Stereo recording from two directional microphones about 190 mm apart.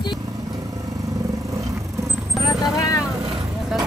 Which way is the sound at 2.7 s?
15° left (ahead or behind).